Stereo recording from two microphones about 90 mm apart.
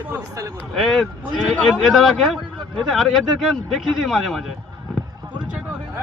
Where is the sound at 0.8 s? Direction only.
Centre (ahead or behind).